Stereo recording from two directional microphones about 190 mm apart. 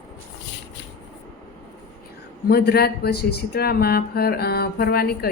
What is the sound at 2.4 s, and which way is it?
A woman's voice, 55° left (ahead or behind).